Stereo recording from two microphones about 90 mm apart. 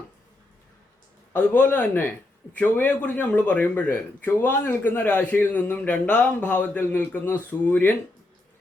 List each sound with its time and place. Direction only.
1.3 s a man's voice: 15° left (ahead or behind)